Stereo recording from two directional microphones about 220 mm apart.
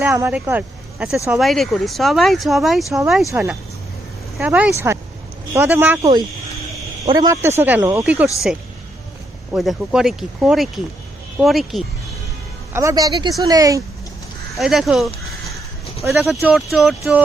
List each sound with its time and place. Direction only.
0.2 s a man's voice: 10° right (ahead or behind)
9.5 s speech: centre (ahead or behind)
12.7 s speech: 15° right (ahead or behind)
14.5 s speech: centre (ahead or behind)